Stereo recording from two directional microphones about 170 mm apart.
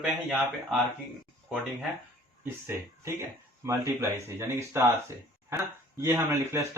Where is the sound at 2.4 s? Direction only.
15° right (ahead or behind).